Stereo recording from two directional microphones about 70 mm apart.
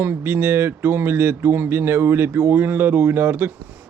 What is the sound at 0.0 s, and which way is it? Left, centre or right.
Speech, right.